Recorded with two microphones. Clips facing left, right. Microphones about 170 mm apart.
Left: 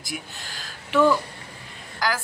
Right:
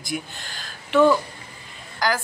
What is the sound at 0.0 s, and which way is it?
Speech, 5° left (ahead or behind).